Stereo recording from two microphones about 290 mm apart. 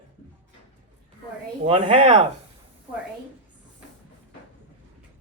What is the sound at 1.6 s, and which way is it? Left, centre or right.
Speech, right.